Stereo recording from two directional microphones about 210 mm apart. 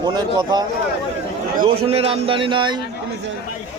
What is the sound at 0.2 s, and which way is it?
Speech, 20° right (ahead or behind).